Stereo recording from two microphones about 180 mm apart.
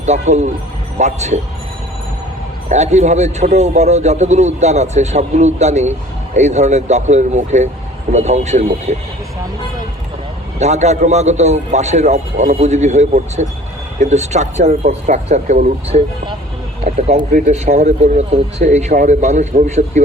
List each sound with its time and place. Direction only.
0.0 s a man's voice: 40° right (ahead or behind)
2.6 s a man's voice: 40° right (ahead or behind)
10.6 s a man's voice: 40° right (ahead or behind)